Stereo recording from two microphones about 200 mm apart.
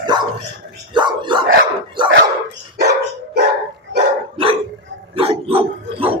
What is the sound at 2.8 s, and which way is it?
Dog, 55° right (ahead or behind).